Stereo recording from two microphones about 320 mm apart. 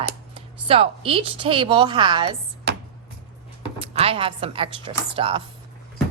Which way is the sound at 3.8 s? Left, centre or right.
Centre.